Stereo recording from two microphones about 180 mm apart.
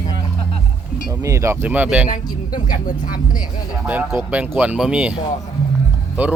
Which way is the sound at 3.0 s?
50° left (ahead or behind).